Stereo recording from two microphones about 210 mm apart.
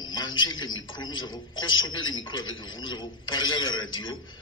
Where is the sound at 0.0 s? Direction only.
20° left (ahead or behind).